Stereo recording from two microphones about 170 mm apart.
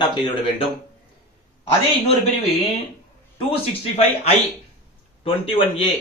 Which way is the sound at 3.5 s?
35° left (ahead or behind).